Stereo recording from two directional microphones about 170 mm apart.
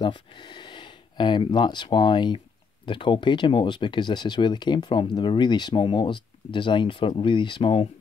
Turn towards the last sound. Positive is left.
turn(degrees=30)  # may be behind; listen again after turning